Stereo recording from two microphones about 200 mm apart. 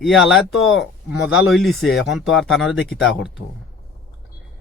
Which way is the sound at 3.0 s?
65° left (ahead or behind).